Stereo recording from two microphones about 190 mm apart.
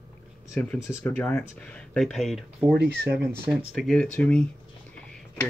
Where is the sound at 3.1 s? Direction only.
5° right (ahead or behind).